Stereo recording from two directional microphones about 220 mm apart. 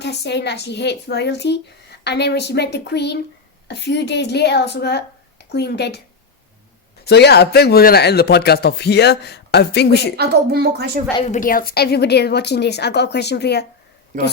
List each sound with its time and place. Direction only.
0.0 s speech: 50° left (ahead or behind)
7.0 s speech: 50° left (ahead or behind)
10.2 s a woman's voice: 45° right (ahead or behind)
11.2 s speech: 35° left (ahead or behind)